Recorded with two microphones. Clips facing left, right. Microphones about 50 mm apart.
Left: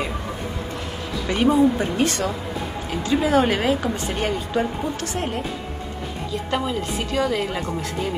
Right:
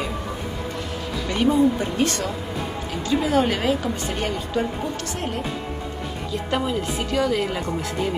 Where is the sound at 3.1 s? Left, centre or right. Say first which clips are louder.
Left 2 dB; left.